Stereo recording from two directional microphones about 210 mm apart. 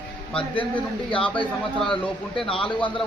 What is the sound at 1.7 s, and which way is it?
Speech, 5° left (ahead or behind).